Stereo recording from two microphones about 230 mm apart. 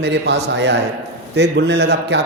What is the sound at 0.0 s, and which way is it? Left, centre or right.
Speech, right.